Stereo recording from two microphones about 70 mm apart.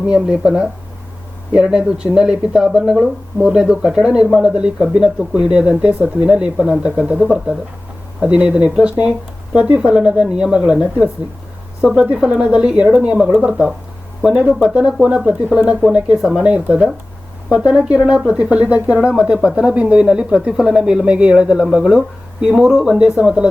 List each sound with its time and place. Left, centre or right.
0.1 s speech: centre
8.2 s speech: centre
17.9 s speech: centre